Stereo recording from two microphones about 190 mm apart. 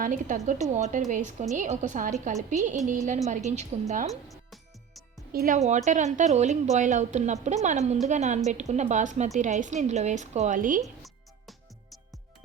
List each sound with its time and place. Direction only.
0.0 s a woman's voice: 45° right (ahead or behind)
4.1 s music: centre (ahead or behind)
5.3 s speech: 50° right (ahead or behind)
5.5 s a woman's voice: 35° right (ahead or behind)
11.0 s music: centre (ahead or behind)